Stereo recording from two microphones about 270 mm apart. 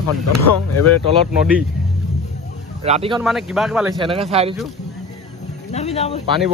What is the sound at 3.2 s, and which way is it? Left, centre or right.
Speech, centre.